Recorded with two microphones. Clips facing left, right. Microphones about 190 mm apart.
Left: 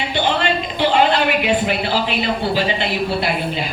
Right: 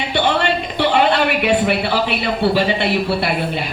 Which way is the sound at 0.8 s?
65° right (ahead or behind).